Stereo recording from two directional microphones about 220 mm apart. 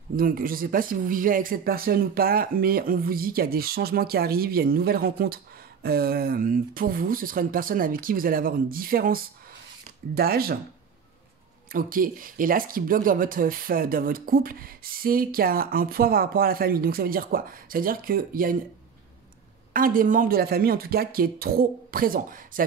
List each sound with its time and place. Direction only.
0.1 s speech: 40° right (ahead or behind)
11.7 s speech: 40° right (ahead or behind)
19.7 s speech: 40° right (ahead or behind)